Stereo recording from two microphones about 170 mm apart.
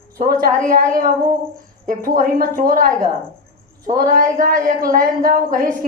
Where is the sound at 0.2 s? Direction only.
55° right (ahead or behind).